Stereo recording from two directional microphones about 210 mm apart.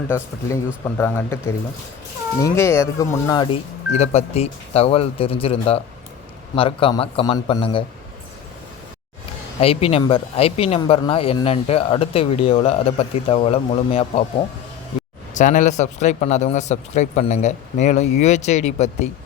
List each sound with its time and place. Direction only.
0.1 s speech: 15° left (ahead or behind)
3.9 s speech: 30° left (ahead or behind)
9.6 s speech: 25° left (ahead or behind)
15.4 s speech: 35° left (ahead or behind)